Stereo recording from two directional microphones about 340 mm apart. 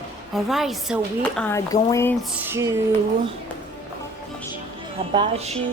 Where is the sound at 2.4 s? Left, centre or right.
Centre.